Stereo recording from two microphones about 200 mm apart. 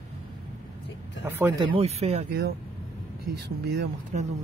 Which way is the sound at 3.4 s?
55° right (ahead or behind).